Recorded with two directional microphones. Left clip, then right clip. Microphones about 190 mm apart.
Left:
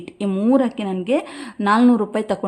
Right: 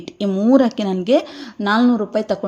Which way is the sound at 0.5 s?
15° right (ahead or behind).